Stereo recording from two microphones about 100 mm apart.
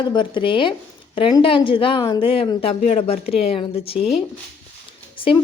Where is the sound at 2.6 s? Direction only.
75° left (ahead or behind).